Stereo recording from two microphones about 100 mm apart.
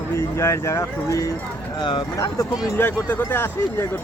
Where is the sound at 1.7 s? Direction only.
50° left (ahead or behind).